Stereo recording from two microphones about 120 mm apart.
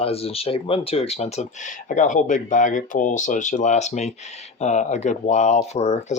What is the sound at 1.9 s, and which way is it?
Speech, 90° left.